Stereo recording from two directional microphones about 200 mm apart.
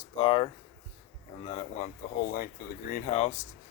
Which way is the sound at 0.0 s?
25° left (ahead or behind).